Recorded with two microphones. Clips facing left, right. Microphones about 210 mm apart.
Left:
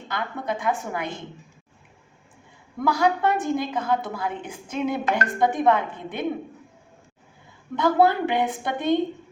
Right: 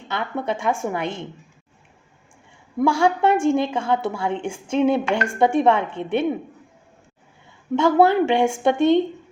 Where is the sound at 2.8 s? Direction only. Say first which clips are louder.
Right 4 dB; 25° right (ahead or behind).